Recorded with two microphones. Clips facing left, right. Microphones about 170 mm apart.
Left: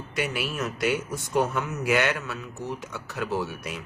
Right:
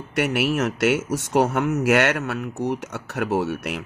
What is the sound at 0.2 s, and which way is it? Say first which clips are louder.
Speech: right 8 dB; 75° right (ahead or behind).